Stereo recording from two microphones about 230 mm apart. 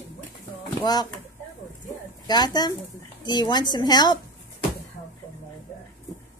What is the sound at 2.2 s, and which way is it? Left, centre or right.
A woman's voice, centre.